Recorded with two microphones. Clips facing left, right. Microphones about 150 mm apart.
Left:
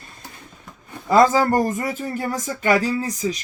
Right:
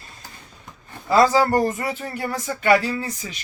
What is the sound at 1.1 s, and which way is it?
Speech, 45° left (ahead or behind).